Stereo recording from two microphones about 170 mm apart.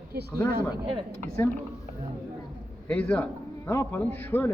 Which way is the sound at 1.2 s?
10° left (ahead or behind).